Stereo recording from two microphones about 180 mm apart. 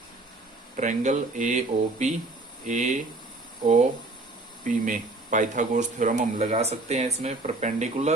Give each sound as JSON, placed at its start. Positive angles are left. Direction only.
{"t": 0.8, "sound": "speech", "side_deg": -45}
{"t": 4.6, "sound": "speech", "side_deg": -45}